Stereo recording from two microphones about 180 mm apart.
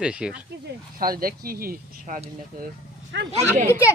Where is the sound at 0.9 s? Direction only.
55° right (ahead or behind).